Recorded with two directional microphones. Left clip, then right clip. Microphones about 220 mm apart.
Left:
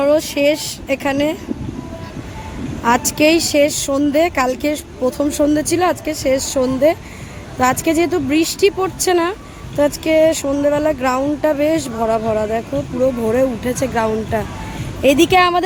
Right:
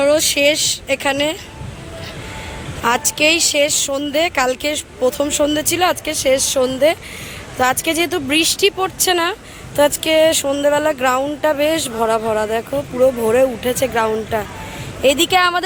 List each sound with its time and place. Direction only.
0.0 s speech: 10° left (ahead or behind)
2.8 s speech: 15° left (ahead or behind)